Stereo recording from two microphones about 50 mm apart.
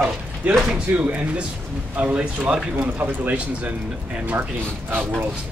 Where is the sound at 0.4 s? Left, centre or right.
Right.